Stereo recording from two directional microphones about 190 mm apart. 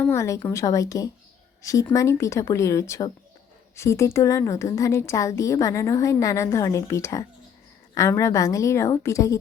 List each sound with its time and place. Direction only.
0.0 s a woman's voice: 15° left (ahead or behind)